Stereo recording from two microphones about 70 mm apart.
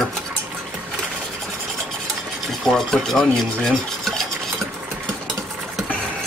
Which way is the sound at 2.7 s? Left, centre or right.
Centre.